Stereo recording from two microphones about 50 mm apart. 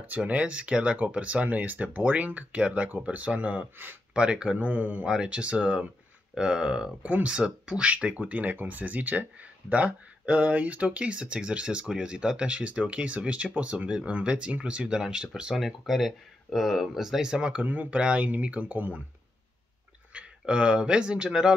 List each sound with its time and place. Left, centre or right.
0.2 s speech: right
5.0 s speech: centre
7.0 s speech: right
7.6 s speech: right
15.6 s speech: centre
17.6 s speech: right
20.2 s speech: centre